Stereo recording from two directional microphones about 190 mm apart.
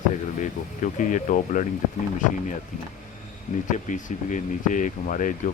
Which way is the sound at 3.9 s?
40° left (ahead or behind).